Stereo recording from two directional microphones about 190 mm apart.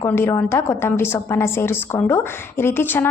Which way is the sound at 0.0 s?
10° left (ahead or behind).